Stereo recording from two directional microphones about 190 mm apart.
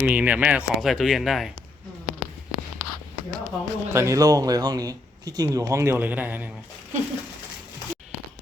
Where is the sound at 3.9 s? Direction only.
15° right (ahead or behind).